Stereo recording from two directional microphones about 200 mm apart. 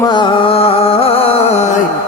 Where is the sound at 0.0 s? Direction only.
20° left (ahead or behind).